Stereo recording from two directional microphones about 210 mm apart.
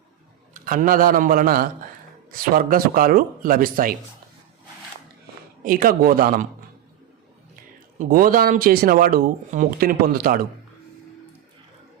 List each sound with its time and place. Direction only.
0.5 s a man's voice: 40° right (ahead or behind)
5.6 s speech: 45° right (ahead or behind)
7.5 s speech: 40° right (ahead or behind)